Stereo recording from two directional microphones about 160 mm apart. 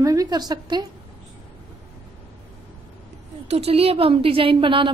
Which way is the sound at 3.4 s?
40° right (ahead or behind).